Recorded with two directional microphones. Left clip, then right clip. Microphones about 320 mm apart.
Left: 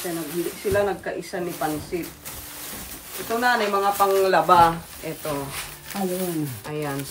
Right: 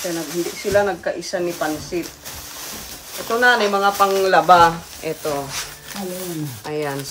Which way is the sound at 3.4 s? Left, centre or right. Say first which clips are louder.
Right 5 dB; right.